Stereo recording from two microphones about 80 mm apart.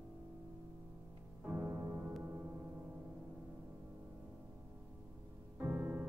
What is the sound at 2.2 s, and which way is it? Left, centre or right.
Gong, right.